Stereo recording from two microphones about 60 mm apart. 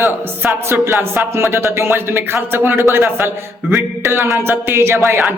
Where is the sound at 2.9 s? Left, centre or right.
Right.